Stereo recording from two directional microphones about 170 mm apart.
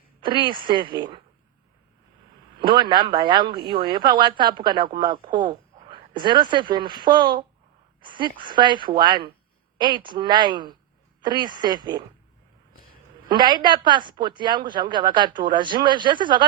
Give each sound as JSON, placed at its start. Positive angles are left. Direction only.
{"t": 0.2, "sound": "speech", "side_deg": -30}
{"t": 2.6, "sound": "speech", "side_deg": -30}
{"t": 13.2, "sound": "speech", "side_deg": -25}